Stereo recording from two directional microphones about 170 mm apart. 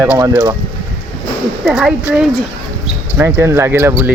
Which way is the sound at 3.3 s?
15° right (ahead or behind).